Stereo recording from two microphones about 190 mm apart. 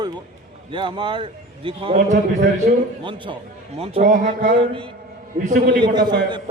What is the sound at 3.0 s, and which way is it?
A man's voice, 25° right (ahead or behind).